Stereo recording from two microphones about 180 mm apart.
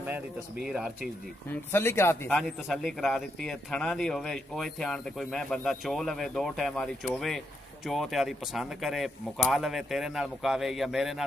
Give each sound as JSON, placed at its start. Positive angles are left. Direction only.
{"t": 0.0, "sound": "speech", "side_deg": -5}
{"t": 1.5, "sound": "speech", "side_deg": 15}
{"t": 2.3, "sound": "speech", "side_deg": 0}